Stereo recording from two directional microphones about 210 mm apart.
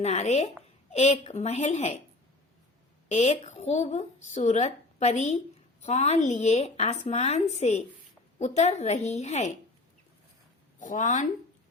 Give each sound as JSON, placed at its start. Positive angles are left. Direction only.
{"t": 0.0, "sound": "speech", "side_deg": 30}
{"t": 3.1, "sound": "speech", "side_deg": 30}
{"t": 10.8, "sound": "speech", "side_deg": 35}